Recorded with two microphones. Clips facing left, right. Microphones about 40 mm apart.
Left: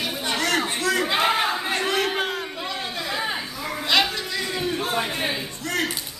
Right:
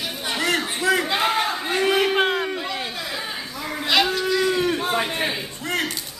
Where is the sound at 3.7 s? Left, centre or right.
Centre.